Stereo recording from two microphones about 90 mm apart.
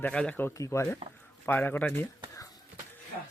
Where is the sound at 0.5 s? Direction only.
35° left (ahead or behind).